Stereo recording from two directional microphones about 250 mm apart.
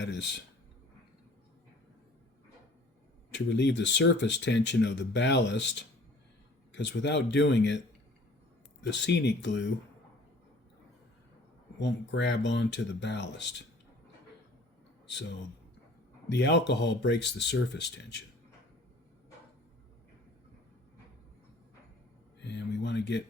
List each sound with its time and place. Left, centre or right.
0.0 s speech: left
3.3 s speech: left
8.8 s speech: left
11.8 s speech: left
15.0 s speech: left
16.3 s speech: left
22.4 s speech: left